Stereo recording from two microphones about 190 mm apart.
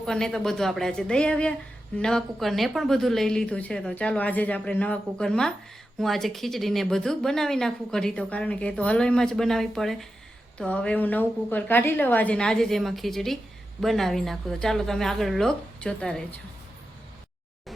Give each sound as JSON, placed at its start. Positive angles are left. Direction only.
{"t": 0.0, "sound": "a woman's voice", "side_deg": 5}